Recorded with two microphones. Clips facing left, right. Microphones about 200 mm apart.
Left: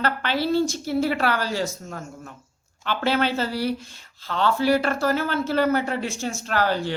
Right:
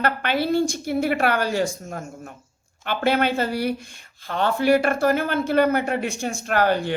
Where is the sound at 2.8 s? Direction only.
50° right (ahead or behind).